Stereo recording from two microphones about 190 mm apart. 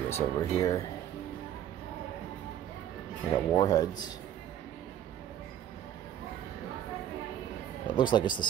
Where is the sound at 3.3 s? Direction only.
20° left (ahead or behind).